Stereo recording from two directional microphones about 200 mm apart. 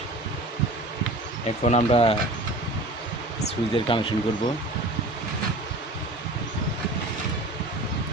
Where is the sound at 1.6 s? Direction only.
35° left (ahead or behind).